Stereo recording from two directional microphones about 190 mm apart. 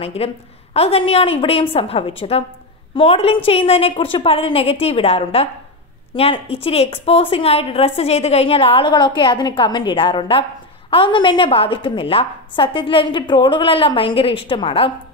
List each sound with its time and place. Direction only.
0.0 s a woman's voice: 30° left (ahead or behind)